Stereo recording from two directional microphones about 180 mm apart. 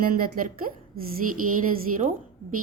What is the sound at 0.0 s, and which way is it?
Speech, 55° right (ahead or behind).